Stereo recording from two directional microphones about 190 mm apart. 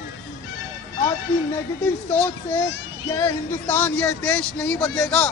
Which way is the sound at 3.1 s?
15° left (ahead or behind).